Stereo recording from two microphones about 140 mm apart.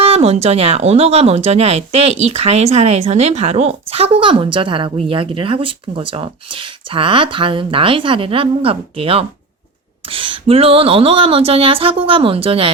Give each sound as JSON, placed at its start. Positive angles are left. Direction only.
{"t": 0.0, "sound": "speech", "side_deg": -50}